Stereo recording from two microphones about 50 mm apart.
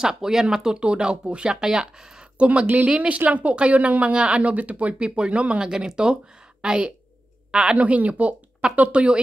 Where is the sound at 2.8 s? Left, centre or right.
Right.